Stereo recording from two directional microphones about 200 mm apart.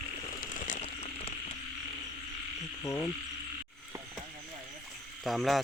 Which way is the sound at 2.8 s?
15° left (ahead or behind).